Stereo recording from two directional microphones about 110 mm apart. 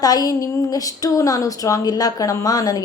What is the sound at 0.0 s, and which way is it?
A woman's voice, 35° left (ahead or behind).